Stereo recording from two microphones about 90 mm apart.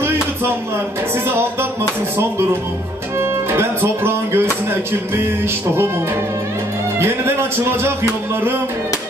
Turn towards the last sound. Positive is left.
turn(degrees=-25)  # may be behind; listen again after turning